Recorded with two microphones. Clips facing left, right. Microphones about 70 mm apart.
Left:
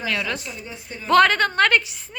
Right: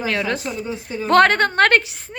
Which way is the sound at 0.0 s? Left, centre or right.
Right.